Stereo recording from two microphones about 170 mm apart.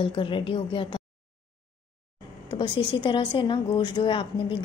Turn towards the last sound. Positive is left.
turn(degrees=30)  # may be behind; listen again after turning